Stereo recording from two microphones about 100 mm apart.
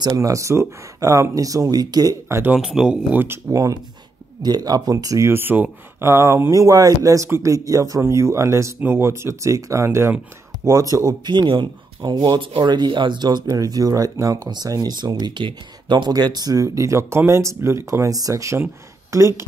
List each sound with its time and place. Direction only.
0.0 s speech: 35° right (ahead or behind)
2.2 s speech: 25° right (ahead or behind)
2.5 s speech: 5° right (ahead or behind); by 5.3 s 35° right (ahead or behind)
5.3 s speech: 20° right (ahead or behind)